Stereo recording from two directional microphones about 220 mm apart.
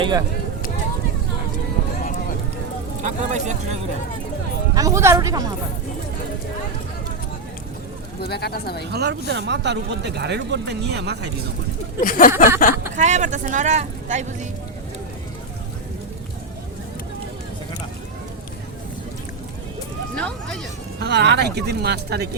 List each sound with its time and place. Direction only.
0.0 s speech: 20° right (ahead or behind)
3.0 s speech: 35° right (ahead or behind)
4.7 s speech: 15° right (ahead or behind)
8.2 s speech: 45° left (ahead or behind)
8.9 s speech: 45° right (ahead or behind)
11.9 s a sound: 40° left (ahead or behind)
13.0 s speech: 35° right (ahead or behind)
20.1 s a sound: 5° left (ahead or behind)
21.0 s speech: 50° right (ahead or behind)